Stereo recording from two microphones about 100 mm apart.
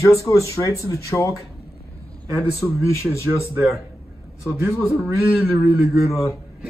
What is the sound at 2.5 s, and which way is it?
Speech, 30° left (ahead or behind).